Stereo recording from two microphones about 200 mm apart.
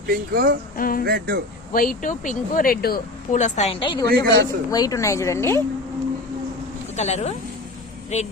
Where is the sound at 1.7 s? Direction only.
45° left (ahead or behind); by 5.6 s 15° left (ahead or behind).